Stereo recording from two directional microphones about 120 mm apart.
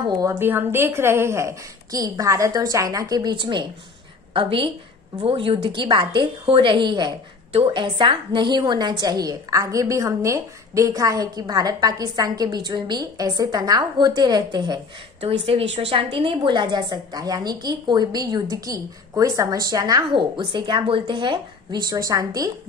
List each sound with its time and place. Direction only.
0.4 s a woman's voice: 20° right (ahead or behind); by 14.8 s 35° right (ahead or behind)
15.1 s a woman's voice: 55° right (ahead or behind); by 22.5 s 30° right (ahead or behind)